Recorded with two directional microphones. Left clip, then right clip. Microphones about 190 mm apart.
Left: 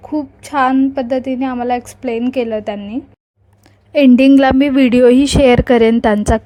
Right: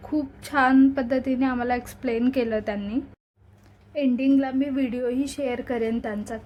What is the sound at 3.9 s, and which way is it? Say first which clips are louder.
A woman's voice: left 14 dB; 60° left (ahead or behind).